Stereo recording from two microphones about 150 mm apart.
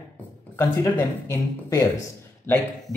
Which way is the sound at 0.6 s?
20° left (ahead or behind).